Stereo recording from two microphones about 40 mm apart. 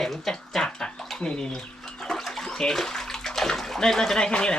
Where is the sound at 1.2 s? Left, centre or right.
Left.